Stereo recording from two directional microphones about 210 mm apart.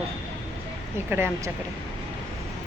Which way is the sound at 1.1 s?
10° right (ahead or behind).